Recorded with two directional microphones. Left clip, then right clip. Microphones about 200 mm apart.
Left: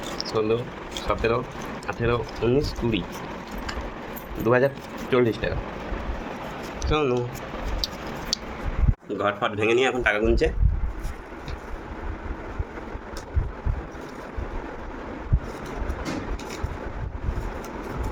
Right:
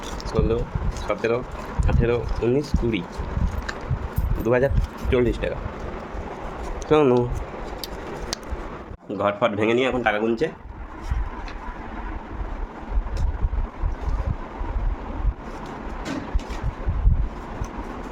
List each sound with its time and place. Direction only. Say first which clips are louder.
0.3 s speech: even; 20° right (ahead or behind)
4.4 s speech: even; 25° right (ahead or behind)
6.9 s speech: right 6 dB; 35° right (ahead or behind)
9.0 s speech: right 3 dB; 35° right (ahead or behind)